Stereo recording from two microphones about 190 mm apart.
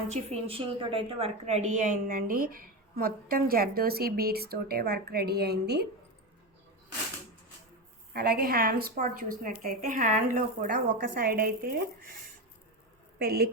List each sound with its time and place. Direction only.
0.1 s a woman's voice: 30° right (ahead or behind); by 5.9 s 60° right (ahead or behind)
8.1 s a woman's voice: 55° right (ahead or behind)
13.1 s a woman's voice: 55° right (ahead or behind)